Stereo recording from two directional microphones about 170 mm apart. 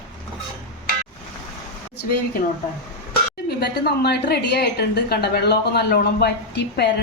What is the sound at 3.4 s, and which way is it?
A woman's voice, 70° left (ahead or behind).